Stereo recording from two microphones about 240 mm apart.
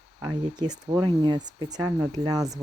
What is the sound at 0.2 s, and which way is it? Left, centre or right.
Speech, centre.